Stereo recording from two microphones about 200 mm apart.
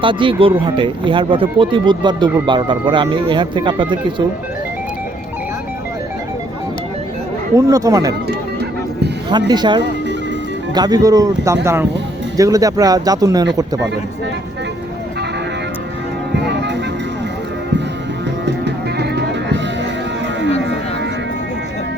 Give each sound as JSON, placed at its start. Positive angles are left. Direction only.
{"t": 0.0, "sound": "speech", "side_deg": -25}
{"t": 7.5, "sound": "speech", "side_deg": -15}
{"t": 9.5, "sound": "speech", "side_deg": -20}
{"t": 16.4, "sound": "music", "side_deg": -60}
{"t": 18.4, "sound": "music", "side_deg": -60}
{"t": 20.6, "sound": "music", "side_deg": -60}